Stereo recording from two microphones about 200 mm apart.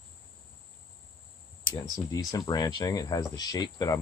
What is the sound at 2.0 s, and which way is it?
Speech, 20° left (ahead or behind).